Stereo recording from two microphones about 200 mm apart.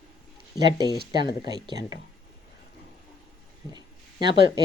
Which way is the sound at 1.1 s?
20° right (ahead or behind).